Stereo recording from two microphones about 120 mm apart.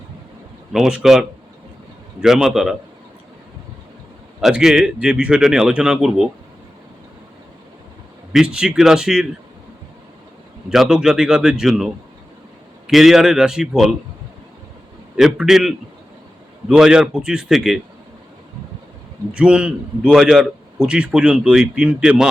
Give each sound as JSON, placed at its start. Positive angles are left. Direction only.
{"t": 0.7, "sound": "a man's voice", "side_deg": -5}
{"t": 2.2, "sound": "a man's voice", "side_deg": -5}
{"t": 4.4, "sound": "a man's voice", "side_deg": -5}
{"t": 8.3, "sound": "a man's voice", "side_deg": -5}
{"t": 10.7, "sound": "a man's voice", "side_deg": -5}
{"t": 12.9, "sound": "a man's voice", "side_deg": 0}
{"t": 15.1, "sound": "a man's voice", "side_deg": -5}
{"t": 19.3, "sound": "a man's voice", "side_deg": -10}